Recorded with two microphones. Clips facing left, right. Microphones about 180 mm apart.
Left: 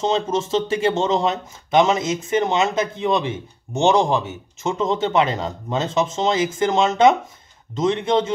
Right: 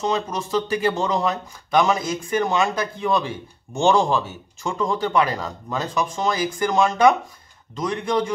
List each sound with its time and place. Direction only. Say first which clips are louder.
0.0 s speech: left 3 dB; 25° left (ahead or behind)